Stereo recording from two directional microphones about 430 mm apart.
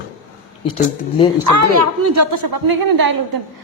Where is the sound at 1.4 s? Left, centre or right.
Right.